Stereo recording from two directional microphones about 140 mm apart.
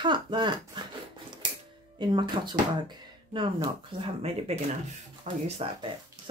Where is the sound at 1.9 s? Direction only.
35° right (ahead or behind); by 5.4 s 55° right (ahead or behind).